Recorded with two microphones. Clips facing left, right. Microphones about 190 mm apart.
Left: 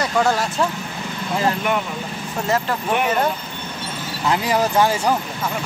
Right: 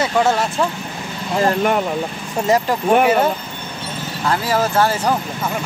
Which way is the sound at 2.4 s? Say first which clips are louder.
Right 5 dB; 15° right (ahead or behind).